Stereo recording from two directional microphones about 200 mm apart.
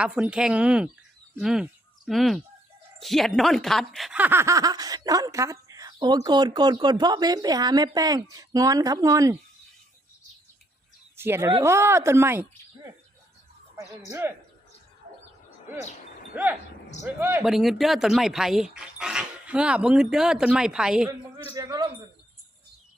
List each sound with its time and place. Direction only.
0.0 s speech: 5° right (ahead or behind)
11.2 s speech: 10° right (ahead or behind)
14.1 s speech: 15° right (ahead or behind)
16.3 s speech: 10° right (ahead or behind)
21.5 s speech: 20° right (ahead or behind)